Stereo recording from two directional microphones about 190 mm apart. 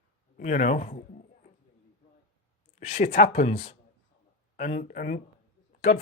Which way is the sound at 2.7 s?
40° left (ahead or behind).